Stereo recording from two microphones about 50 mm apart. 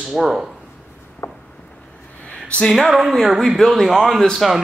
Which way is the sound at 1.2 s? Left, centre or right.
Left.